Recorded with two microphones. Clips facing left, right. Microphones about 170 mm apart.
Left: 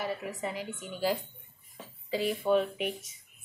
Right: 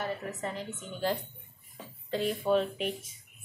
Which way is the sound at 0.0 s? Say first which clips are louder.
Even; 10° left (ahead or behind).